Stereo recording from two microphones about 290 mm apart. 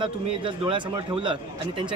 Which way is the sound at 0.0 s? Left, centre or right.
Centre.